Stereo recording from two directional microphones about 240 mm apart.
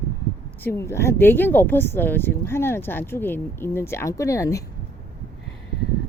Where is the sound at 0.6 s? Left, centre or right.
Centre.